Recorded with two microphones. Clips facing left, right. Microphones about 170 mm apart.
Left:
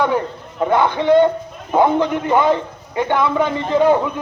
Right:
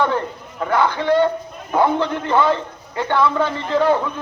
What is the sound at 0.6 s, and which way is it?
A man's voice, 20° left (ahead or behind).